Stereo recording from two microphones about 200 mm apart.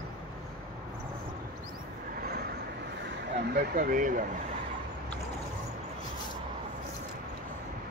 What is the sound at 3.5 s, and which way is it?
Speech, 50° right (ahead or behind).